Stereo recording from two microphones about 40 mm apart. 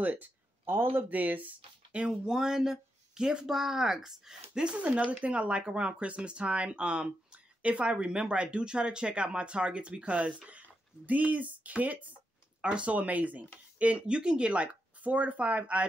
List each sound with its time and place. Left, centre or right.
0.0 s a sound: right
1.1 s speech: right
1.9 s speech: right
2.2 s speech: centre
4.7 s speech: right
12.6 s speech: right
12.9 s speech: right